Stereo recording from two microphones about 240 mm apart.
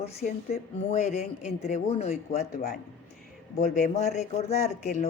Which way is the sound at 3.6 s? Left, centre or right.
Left.